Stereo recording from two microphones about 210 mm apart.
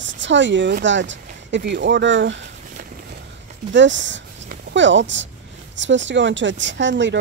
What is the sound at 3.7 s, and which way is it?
A woman's voice, 60° right (ahead or behind).